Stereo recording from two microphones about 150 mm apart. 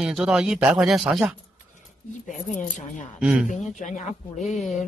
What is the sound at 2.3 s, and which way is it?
Speech, 55° left (ahead or behind).